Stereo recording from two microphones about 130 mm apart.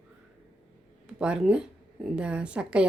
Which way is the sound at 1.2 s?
5° right (ahead or behind).